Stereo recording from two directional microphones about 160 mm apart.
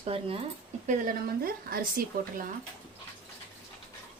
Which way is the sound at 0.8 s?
60° right (ahead or behind).